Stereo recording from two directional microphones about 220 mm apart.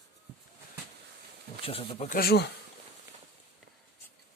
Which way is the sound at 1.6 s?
25° left (ahead or behind).